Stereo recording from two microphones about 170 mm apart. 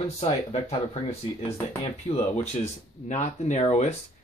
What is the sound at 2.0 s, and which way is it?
Speech, 40° left (ahead or behind).